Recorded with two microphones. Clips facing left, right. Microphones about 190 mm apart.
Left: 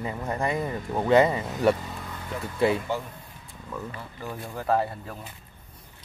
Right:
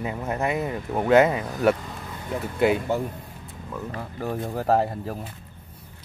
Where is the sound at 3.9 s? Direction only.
45° right (ahead or behind).